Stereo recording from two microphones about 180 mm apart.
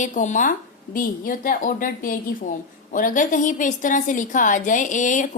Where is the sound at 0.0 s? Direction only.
45° left (ahead or behind).